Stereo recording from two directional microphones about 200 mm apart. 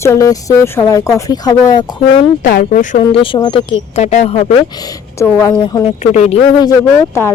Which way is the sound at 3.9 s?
35° left (ahead or behind).